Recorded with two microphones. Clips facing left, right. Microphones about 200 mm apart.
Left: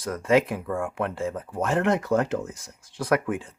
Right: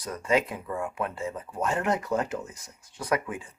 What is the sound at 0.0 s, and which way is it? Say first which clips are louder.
Speech: left 5 dB; 90° left.